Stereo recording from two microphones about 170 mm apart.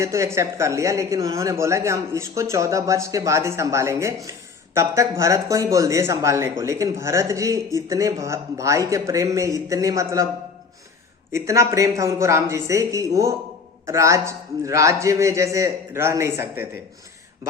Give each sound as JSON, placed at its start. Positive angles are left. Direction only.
{"t": 0.0, "sound": "speech", "side_deg": -15}
{"t": 11.3, "sound": "speech", "side_deg": -15}